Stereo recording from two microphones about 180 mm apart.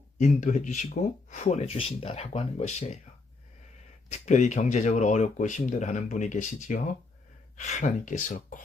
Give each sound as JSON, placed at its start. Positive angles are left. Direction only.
{"t": 0.2, "sound": "speech", "side_deg": 40}
{"t": 4.1, "sound": "speech", "side_deg": 40}